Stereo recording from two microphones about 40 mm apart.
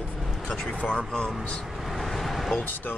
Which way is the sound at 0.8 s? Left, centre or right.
Left.